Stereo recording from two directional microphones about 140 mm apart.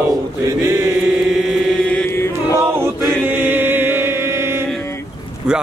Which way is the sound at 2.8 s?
15° right (ahead or behind).